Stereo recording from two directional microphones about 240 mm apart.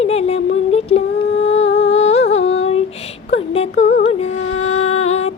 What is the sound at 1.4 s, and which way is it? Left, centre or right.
Humming, left.